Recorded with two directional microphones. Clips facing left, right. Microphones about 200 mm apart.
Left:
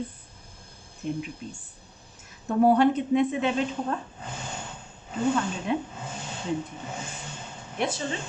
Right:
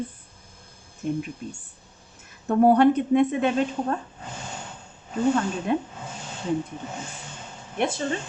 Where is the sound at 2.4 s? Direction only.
55° right (ahead or behind).